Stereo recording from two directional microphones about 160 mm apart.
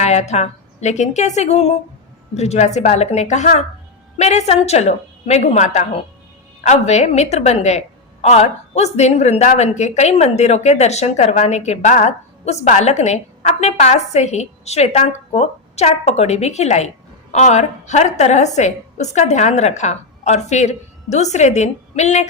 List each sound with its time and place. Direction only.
0.0 s a woman's voice: 45° left (ahead or behind)